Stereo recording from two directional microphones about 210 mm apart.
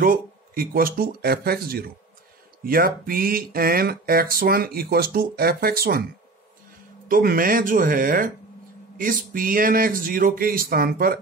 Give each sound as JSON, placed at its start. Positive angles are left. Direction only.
{"t": 0.0, "sound": "speech", "side_deg": -45}
{"t": 7.1, "sound": "speech", "side_deg": -45}